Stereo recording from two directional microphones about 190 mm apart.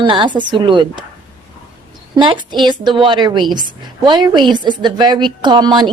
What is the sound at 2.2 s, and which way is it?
A woman's voice, 25° right (ahead or behind).